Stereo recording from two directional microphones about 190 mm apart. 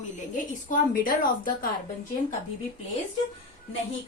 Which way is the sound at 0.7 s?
45° left (ahead or behind).